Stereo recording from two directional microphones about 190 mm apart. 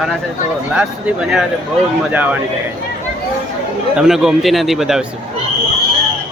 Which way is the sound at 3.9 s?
5° right (ahead or behind).